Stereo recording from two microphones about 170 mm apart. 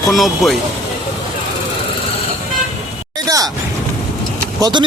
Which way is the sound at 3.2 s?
20° right (ahead or behind).